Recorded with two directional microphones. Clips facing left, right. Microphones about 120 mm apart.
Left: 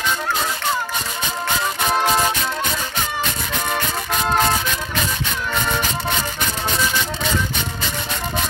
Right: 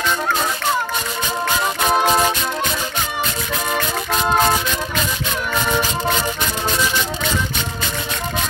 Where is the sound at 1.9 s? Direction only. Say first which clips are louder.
Right 2 dB; 20° right (ahead or behind).